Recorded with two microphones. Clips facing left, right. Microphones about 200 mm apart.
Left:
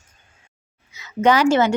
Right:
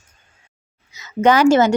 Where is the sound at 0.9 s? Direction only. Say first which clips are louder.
Right 2 dB; 45° right (ahead or behind).